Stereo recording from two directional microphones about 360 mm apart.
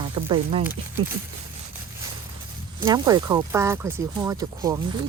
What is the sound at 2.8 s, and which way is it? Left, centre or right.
Speech, centre.